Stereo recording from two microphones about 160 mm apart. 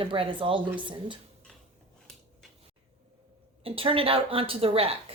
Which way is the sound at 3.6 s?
35° right (ahead or behind).